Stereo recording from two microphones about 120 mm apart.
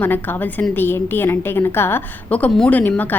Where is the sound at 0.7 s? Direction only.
15° left (ahead or behind).